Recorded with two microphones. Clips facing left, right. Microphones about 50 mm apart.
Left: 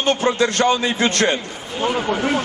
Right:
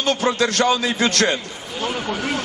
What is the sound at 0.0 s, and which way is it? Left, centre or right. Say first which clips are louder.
Speech: left 2 dB; left.